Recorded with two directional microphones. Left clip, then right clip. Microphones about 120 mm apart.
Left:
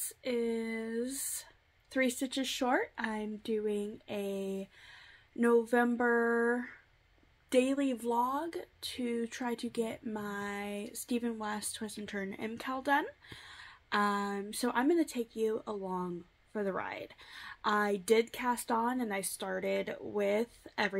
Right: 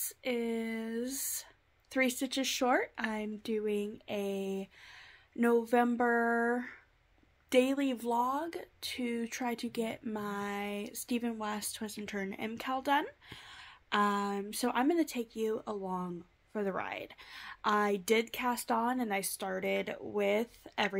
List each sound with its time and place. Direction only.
0.0 s speech: 25° right (ahead or behind)
5.9 s a sound: 20° right (ahead or behind)
7.4 s speech: 25° right (ahead or behind)